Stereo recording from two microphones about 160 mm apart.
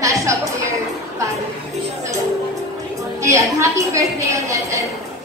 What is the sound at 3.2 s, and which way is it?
A woman's voice, 20° right (ahead or behind).